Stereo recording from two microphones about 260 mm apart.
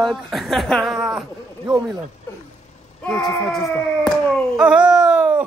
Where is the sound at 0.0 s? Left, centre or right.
Centre.